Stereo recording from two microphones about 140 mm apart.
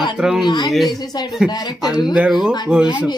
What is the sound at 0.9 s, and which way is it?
Speech, 25° left (ahead or behind).